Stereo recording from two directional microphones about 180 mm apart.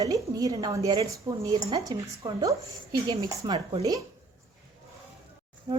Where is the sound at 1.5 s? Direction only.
30° right (ahead or behind).